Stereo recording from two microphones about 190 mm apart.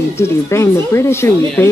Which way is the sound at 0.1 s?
15° left (ahead or behind).